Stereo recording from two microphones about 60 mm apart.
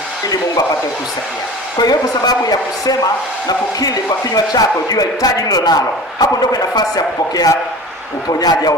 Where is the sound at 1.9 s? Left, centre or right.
Left.